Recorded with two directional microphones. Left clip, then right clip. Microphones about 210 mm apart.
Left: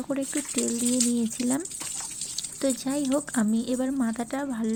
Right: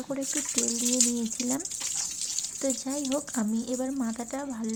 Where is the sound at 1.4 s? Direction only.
15° left (ahead or behind).